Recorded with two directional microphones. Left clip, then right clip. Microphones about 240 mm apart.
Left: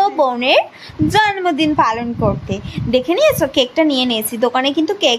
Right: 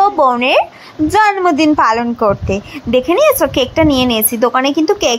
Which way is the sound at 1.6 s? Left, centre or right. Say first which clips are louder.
Right 4 dB; right.